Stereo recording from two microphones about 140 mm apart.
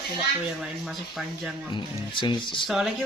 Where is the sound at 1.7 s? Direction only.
35° left (ahead or behind).